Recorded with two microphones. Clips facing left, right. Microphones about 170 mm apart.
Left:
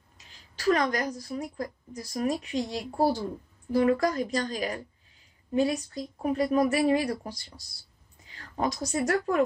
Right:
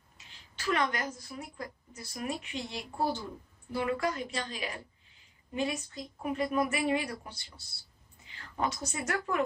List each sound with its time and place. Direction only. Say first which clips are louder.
0.6 s a woman's voice: left 6 dB; 40° left (ahead or behind)